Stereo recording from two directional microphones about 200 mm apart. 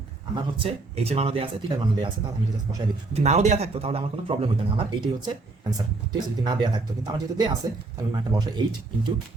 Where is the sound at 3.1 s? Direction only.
35° right (ahead or behind).